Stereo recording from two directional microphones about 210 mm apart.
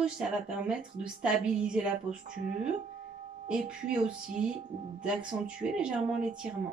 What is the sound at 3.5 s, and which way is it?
Speech, 5° right (ahead or behind).